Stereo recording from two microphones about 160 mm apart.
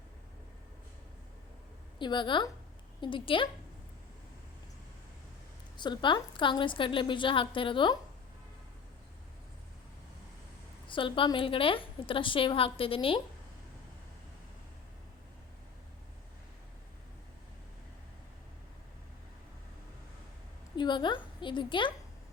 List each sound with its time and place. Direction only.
2.0 s a woman's voice: 30° left (ahead or behind)
5.7 s a woman's voice: 30° left (ahead or behind)
10.8 s a woman's voice: 30° left (ahead or behind)
20.7 s a woman's voice: 30° left (ahead or behind)